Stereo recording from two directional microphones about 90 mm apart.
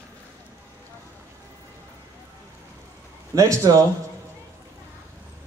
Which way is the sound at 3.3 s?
35° right (ahead or behind).